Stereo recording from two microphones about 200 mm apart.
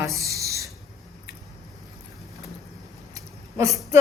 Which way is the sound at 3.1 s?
15° right (ahead or behind).